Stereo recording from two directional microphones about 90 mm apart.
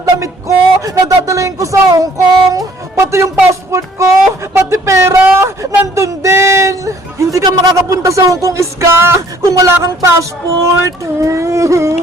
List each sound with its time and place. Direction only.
0.0 s speech: 35° right (ahead or behind)